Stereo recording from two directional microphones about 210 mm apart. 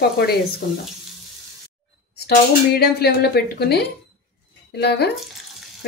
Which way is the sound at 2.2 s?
50° left (ahead or behind).